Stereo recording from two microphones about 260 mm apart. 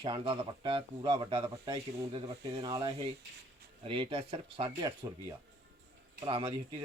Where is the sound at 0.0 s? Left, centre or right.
Centre.